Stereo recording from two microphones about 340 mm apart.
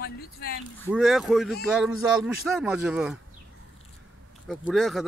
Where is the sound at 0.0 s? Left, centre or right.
Left.